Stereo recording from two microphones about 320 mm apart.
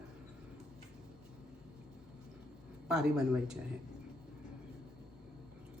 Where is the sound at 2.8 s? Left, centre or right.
Centre.